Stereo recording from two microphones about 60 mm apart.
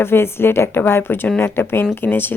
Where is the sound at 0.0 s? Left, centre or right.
Left.